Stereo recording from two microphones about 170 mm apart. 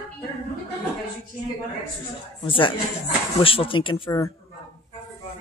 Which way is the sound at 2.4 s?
30° left (ahead or behind).